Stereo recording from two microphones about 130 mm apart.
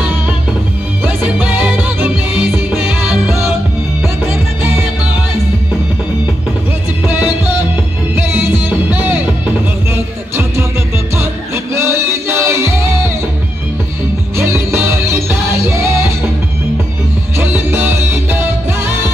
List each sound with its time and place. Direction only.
1.0 s music: 10° right (ahead or behind)
3.3 s music: 20° right (ahead or behind)
8.2 s music: 20° right (ahead or behind)
14.3 s music: 20° right (ahead or behind)
17.4 s music: 15° right (ahead or behind)